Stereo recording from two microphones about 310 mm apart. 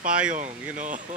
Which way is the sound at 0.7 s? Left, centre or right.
Right.